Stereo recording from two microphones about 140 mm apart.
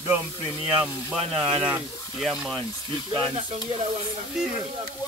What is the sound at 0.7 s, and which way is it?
Speech, 5° right (ahead or behind).